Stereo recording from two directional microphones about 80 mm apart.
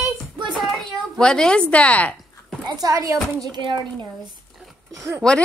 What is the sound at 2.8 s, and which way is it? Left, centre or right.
Speech, right.